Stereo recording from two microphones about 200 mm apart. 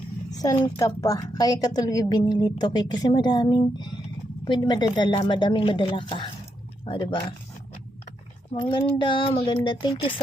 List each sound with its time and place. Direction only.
0.3 s a woman's voice: 20° left (ahead or behind)
8.5 s a woman's voice: 25° left (ahead or behind)